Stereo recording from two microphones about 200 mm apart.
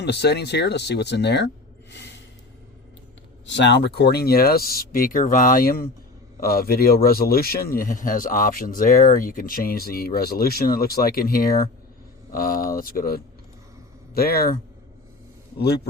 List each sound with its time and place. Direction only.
0.0 s speech: 55° left (ahead or behind)
3.4 s speech: 60° left (ahead or behind)